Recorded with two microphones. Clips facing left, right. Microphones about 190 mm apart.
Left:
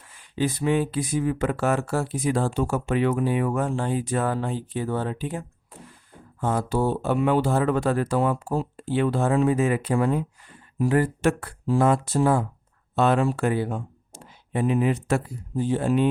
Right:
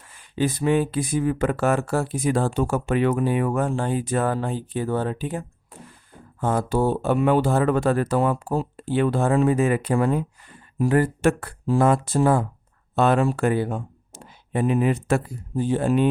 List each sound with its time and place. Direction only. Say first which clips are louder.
0.1 s speech: right 2 dB; 50° right (ahead or behind)